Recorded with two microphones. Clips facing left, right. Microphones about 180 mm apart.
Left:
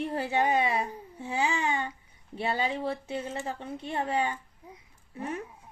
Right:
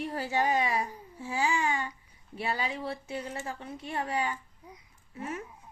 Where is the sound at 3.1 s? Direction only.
25° left (ahead or behind).